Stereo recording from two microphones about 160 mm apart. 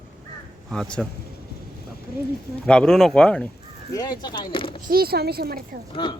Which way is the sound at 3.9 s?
25° left (ahead or behind).